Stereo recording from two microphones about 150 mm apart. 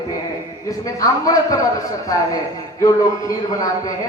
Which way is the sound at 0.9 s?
25° left (ahead or behind).